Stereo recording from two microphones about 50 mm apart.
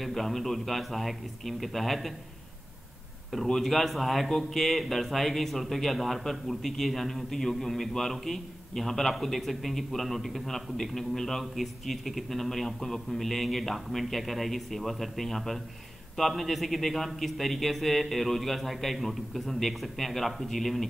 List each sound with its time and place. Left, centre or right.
0.0 s speech: centre
3.4 s speech: centre